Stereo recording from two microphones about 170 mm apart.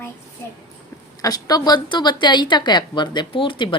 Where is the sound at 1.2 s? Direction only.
20° left (ahead or behind).